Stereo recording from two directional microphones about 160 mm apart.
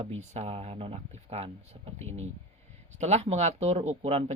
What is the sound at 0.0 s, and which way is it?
Speech, 40° right (ahead or behind).